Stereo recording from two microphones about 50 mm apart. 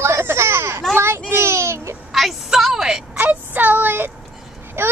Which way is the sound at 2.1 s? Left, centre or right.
Centre.